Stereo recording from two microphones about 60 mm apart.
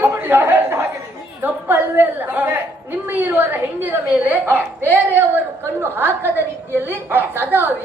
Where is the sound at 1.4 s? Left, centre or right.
Right.